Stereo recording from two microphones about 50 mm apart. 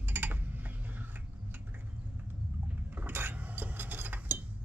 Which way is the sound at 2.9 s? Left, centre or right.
Right.